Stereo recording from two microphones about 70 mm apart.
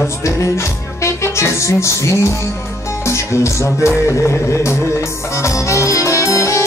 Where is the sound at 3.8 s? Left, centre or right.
Left.